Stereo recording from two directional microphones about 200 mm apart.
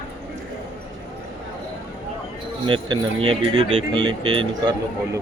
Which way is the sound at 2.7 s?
25° right (ahead or behind).